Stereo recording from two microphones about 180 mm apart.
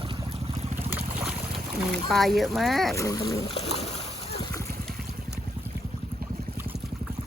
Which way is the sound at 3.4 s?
35° left (ahead or behind).